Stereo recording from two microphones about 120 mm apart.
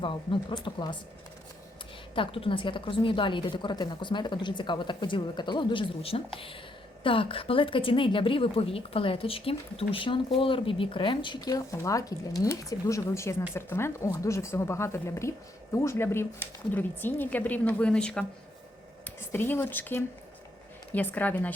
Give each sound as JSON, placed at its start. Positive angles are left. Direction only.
{"t": 0.0, "sound": "a woman's voice", "side_deg": 45}
{"t": 2.1, "sound": "a woman's voice", "side_deg": 50}
{"t": 19.0, "sound": "speech", "side_deg": 20}